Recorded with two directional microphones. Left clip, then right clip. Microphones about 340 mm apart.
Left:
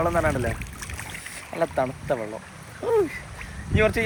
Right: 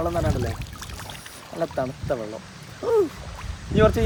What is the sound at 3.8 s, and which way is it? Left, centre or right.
Speech, centre.